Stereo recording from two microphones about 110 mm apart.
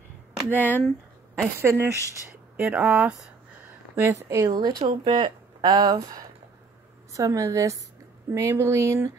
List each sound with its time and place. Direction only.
0.6 s speech: 15° left (ahead or behind)
1.4 s speech: 20° right (ahead or behind)
3.9 s a woman's voice: 30° right (ahead or behind)
4.5 s speech: 40° right (ahead or behind)
7.1 s speech: 30° right (ahead or behind)